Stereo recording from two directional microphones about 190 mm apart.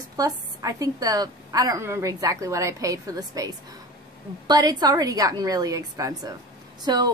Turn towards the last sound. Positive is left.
turn(degrees=-20)  # may be behind; listen again after turning